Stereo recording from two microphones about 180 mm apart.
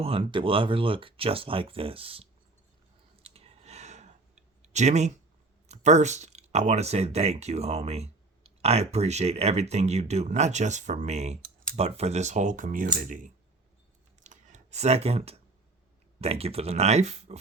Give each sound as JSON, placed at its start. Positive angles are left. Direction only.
{"t": 0.0, "sound": "speech", "side_deg": -30}
{"t": 3.2, "sound": "a sound", "side_deg": -35}
{"t": 4.6, "sound": "speech", "side_deg": -40}
{"t": 14.3, "sound": "clicking", "side_deg": -40}
{"t": 16.2, "sound": "speech", "side_deg": -35}